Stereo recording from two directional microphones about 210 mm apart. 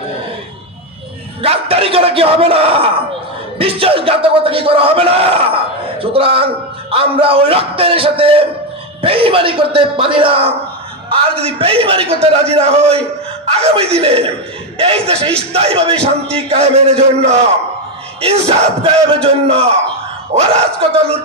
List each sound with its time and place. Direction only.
1.4 s speech: 30° right (ahead or behind)